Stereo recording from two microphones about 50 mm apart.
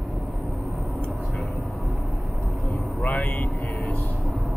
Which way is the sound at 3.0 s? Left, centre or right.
Left.